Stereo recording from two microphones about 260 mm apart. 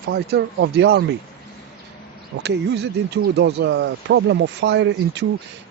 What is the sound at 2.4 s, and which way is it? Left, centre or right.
Speech, right.